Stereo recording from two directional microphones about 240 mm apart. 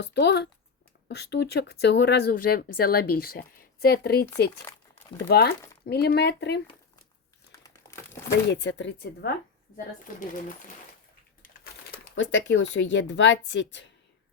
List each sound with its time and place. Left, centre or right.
0.0 s a woman's voice: left
5.3 s a woman's voice: left
8.4 s a woman's voice: left
12.1 s speech: left